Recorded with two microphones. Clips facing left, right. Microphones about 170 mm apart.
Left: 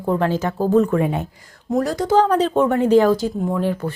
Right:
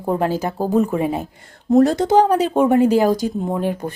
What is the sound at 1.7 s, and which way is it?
Speech, 25° right (ahead or behind).